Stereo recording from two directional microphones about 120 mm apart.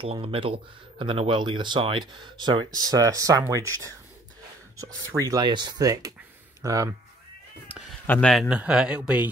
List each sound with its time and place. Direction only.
0.0 s speech: 50° right (ahead or behind); by 6.9 s 30° right (ahead or behind)
8.1 s a man's voice: 5° left (ahead or behind)
8.5 s speech: 10° right (ahead or behind)